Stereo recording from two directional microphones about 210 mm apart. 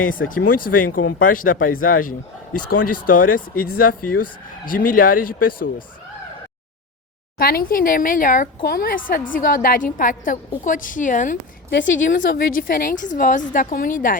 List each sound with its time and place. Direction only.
0.3 s a woman's voice: 40° left (ahead or behind)
7.3 s a woman's voice: 45° left (ahead or behind)
11.7 s a woman's voice: 60° left (ahead or behind)
12.2 s a woman's voice: 40° left (ahead or behind)